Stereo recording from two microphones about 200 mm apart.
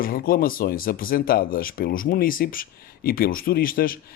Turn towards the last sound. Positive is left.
turn(degrees=45)  # may be behind; listen again after turning